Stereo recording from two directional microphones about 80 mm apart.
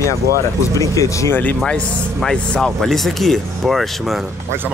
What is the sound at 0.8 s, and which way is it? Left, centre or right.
Speech, left.